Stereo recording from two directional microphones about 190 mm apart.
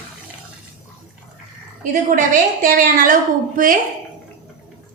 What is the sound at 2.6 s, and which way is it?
A woman's voice, 45° right (ahead or behind).